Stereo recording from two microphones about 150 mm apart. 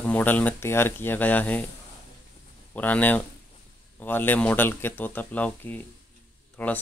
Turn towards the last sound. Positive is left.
turn(degrees=10)  # may be behind; listen again after turning